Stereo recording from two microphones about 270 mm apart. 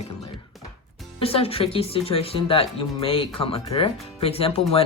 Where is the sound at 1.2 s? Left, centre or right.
Left.